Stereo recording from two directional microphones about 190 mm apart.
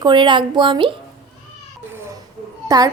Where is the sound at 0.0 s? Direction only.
25° right (ahead or behind).